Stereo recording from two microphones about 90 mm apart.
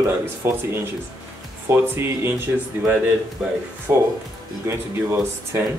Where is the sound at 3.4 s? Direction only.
5° right (ahead or behind).